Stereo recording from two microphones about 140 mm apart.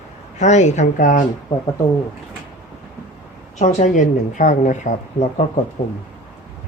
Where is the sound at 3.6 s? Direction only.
55° left (ahead or behind).